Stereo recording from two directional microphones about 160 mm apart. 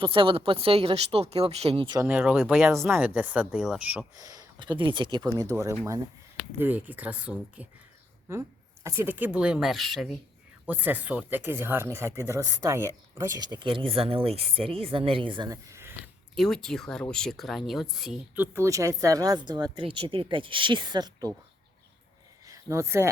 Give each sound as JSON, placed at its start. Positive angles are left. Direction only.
{"t": 0.0, "sound": "speech", "side_deg": -35}
{"t": 2.0, "sound": "speech", "side_deg": -5}
{"t": 4.2, "sound": "a sound", "side_deg": -25}
{"t": 4.8, "sound": "speech", "side_deg": -30}
{"t": 6.6, "sound": "speech", "side_deg": -10}
{"t": 10.7, "sound": "speech", "side_deg": -10}
{"t": 16.3, "sound": "speech", "side_deg": 0}
{"t": 18.5, "sound": "speech", "side_deg": -20}
{"t": 22.4, "sound": "speech", "side_deg": -20}